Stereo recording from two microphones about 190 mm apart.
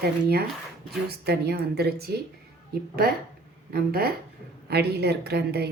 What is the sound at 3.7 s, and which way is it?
A woman's voice, 55° right (ahead or behind).